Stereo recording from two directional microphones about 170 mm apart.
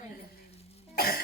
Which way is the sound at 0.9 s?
65° left (ahead or behind).